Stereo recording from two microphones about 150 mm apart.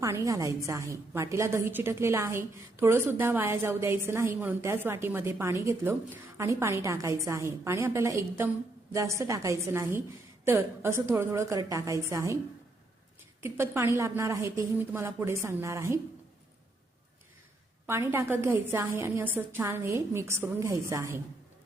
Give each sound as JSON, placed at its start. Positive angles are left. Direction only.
{"t": 0.0, "sound": "a woman's voice", "side_deg": -20}
{"t": 13.4, "sound": "a woman's voice", "side_deg": -15}
{"t": 17.8, "sound": "a woman's voice", "side_deg": -15}